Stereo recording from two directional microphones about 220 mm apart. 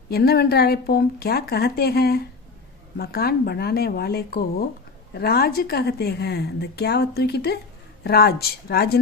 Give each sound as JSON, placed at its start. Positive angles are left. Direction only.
{"t": 0.1, "sound": "speech", "side_deg": 45}